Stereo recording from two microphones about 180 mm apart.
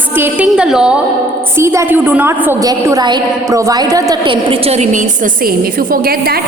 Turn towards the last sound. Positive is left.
turn(degrees=-55)  # may be behind; listen again after turning